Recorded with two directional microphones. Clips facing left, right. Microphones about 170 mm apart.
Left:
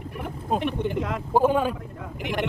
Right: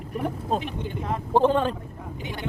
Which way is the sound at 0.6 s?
65° left (ahead or behind).